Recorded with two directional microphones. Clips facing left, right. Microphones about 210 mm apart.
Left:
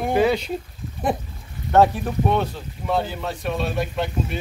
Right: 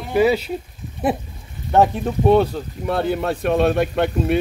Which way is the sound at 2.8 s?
60° right (ahead or behind).